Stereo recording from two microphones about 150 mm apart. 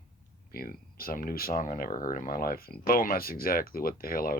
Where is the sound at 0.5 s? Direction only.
80° left.